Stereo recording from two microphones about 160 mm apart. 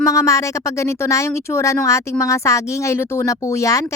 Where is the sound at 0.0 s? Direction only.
20° left (ahead or behind).